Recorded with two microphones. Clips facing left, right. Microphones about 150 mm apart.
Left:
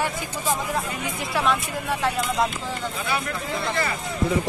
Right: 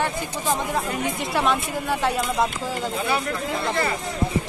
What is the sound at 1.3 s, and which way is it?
Speech, centre (ahead or behind).